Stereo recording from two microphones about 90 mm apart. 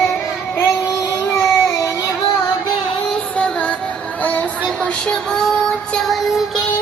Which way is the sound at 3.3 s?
10° left (ahead or behind).